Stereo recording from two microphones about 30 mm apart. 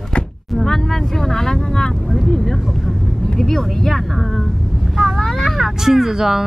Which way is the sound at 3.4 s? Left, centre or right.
Centre.